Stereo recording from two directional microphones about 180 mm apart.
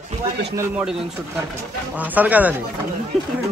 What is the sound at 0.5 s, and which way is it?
A man's voice, 5° right (ahead or behind).